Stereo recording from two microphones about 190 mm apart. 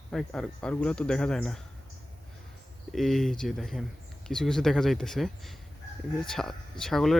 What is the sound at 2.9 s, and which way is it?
Speech, centre (ahead or behind).